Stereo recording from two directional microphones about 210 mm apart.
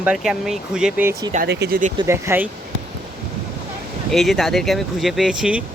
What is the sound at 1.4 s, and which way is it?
Speech, 50° right (ahead or behind).